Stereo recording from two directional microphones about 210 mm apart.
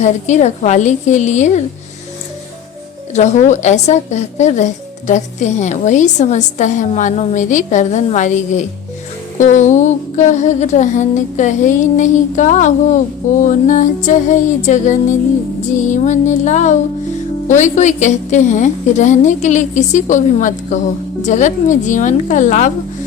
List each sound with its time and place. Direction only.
0.0 s a woman's voice: 35° left (ahead or behind)
3.1 s a woman's voice: 35° left (ahead or behind)